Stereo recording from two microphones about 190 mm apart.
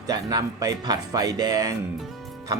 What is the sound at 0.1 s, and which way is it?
Speech, 20° right (ahead or behind).